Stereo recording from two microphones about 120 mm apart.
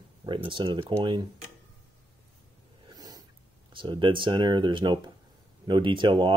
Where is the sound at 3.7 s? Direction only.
45° right (ahead or behind).